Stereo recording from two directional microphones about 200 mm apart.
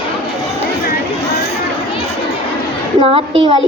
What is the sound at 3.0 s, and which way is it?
Speech, 25° right (ahead or behind).